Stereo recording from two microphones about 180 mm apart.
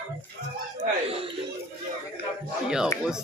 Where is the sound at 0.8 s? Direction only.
30° right (ahead or behind).